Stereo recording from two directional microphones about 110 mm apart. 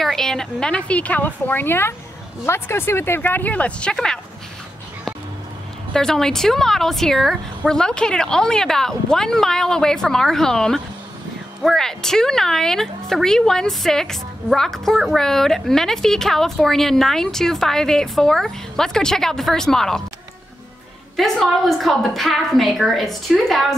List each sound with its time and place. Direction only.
0.0 s a woman's voice: 5° left (ahead or behind)
5.9 s speech: 5° left (ahead or behind)
21.2 s speech: centre (ahead or behind)